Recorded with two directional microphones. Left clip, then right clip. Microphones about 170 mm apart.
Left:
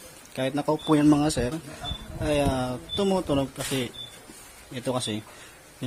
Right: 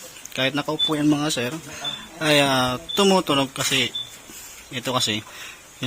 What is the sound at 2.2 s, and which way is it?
Speech, centre (ahead or behind).